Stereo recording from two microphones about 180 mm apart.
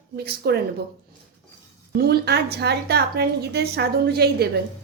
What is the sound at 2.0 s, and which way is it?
A woman's voice, 65° right (ahead or behind).